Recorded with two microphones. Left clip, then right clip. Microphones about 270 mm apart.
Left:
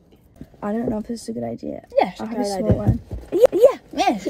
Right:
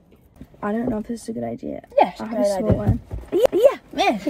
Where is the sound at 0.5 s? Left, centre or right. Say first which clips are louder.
Even; left.